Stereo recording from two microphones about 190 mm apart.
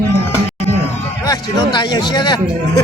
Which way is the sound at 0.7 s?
15° left (ahead or behind).